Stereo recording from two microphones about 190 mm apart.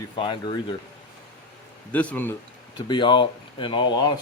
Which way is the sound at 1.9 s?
10° left (ahead or behind).